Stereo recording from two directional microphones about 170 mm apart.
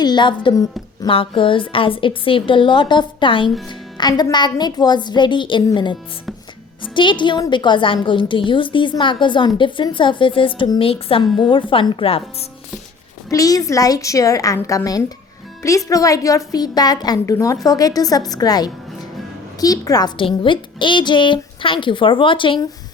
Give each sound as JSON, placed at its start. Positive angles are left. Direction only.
{"t": 0.0, "sound": "a woman's voice", "side_deg": 25}
{"t": 13.3, "sound": "a woman's voice", "side_deg": 20}